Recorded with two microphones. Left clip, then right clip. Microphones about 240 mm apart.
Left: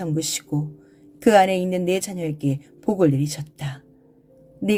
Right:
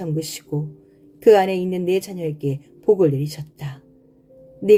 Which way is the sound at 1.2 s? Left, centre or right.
Left.